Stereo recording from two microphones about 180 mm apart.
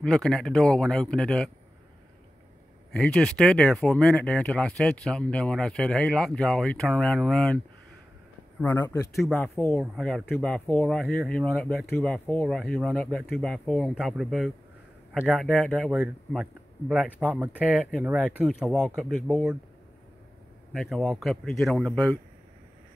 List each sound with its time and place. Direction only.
0.0 s speech: 5° left (ahead or behind)
3.0 s speech: 5° left (ahead or behind)
9.1 s speech: 5° left (ahead or behind)
20.7 s speech: centre (ahead or behind)